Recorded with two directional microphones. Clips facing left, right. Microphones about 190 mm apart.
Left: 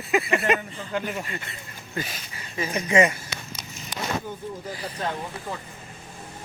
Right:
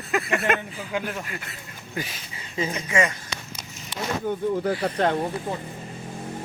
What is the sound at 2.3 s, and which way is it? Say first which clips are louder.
Speech: right 3 dB; 25° right (ahead or behind).